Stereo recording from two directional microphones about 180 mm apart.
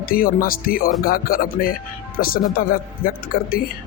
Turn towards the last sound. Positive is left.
turn(degrees=55)  # may be behind; listen again after turning